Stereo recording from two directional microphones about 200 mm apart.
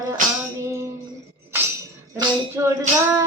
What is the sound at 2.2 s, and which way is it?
Music, 15° right (ahead or behind).